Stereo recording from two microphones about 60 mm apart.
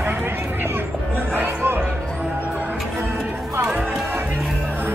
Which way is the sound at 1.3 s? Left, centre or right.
Right.